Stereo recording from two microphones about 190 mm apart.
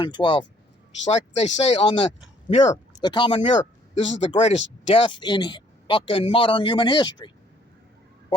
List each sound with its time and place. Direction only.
0.0 s a man's voice: 25° left (ahead or behind)
3.0 s a man's voice: 25° left (ahead or behind)